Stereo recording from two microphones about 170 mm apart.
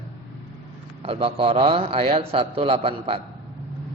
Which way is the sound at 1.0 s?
35° right (ahead or behind).